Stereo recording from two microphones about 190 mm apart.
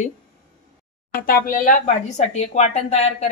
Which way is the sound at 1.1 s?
50° left (ahead or behind).